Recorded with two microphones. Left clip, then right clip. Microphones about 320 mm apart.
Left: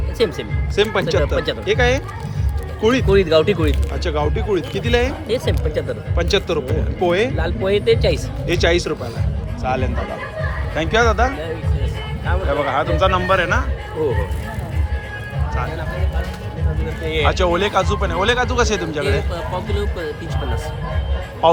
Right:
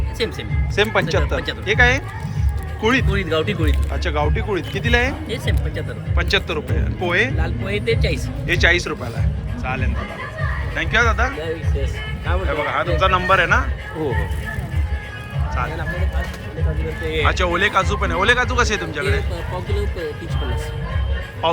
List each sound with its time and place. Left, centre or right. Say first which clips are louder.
0.2 s speech: left 5 dB; left
0.8 s speech: left 1 dB; centre
3.1 s speech: left 7 dB; left
4.0 s speech: left 1 dB; centre
5.3 s speech: left 6 dB; left
6.1 s speech: left 1 dB; centre
7.3 s speech: left 6 dB; left
8.4 s speech: right 1 dB; centre
12.5 s speech: left 2 dB; centre
17.1 s speech: left 2 dB; centre
21.4 s speech: left 6 dB; centre